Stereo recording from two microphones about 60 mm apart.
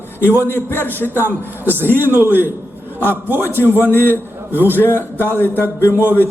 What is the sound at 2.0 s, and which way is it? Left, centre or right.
A man's voice, right.